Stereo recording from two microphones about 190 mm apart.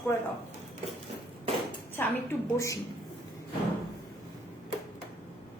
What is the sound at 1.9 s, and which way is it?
Speech, 15° left (ahead or behind).